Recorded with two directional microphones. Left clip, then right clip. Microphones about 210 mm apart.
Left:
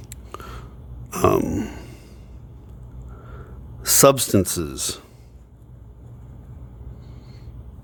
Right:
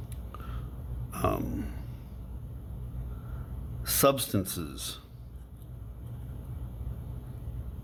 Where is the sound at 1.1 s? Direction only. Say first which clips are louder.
Left 12 dB; 50° left (ahead or behind).